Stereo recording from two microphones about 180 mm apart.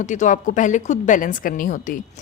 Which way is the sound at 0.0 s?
45° left (ahead or behind).